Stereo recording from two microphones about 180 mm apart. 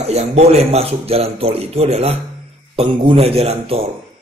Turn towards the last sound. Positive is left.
turn(degrees=-35)  # may be behind; listen again after turning